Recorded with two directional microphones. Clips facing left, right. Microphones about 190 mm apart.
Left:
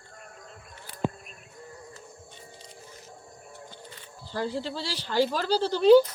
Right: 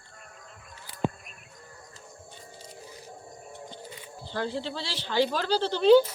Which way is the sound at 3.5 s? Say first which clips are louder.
Right 3 dB; 15° right (ahead or behind).